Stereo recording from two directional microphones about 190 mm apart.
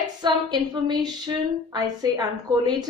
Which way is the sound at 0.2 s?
25° right (ahead or behind).